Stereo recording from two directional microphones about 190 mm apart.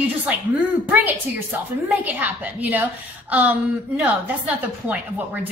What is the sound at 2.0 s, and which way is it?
Speech, 10° right (ahead or behind).